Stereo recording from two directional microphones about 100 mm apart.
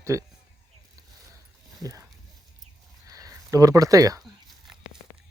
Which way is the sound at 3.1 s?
35° right (ahead or behind).